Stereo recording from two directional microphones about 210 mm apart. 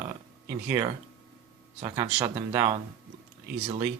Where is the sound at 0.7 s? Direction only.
10° right (ahead or behind).